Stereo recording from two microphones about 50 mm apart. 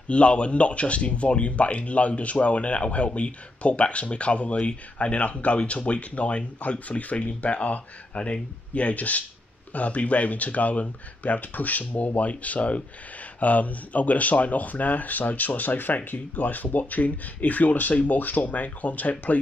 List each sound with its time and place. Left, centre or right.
0.1 s speech: left